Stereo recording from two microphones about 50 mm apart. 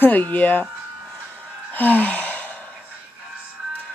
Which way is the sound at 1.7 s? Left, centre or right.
Left.